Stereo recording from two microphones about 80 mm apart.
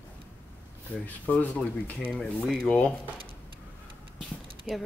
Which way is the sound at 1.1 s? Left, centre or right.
Centre.